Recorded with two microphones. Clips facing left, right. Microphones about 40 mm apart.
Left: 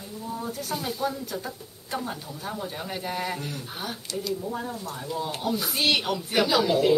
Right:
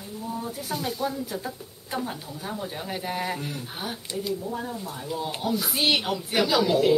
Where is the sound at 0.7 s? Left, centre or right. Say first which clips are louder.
Right 1 dB; centre.